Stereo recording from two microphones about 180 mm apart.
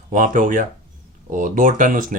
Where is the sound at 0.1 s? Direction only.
45° right (ahead or behind).